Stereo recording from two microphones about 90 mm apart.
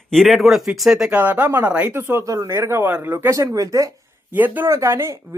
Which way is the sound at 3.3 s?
40° right (ahead or behind).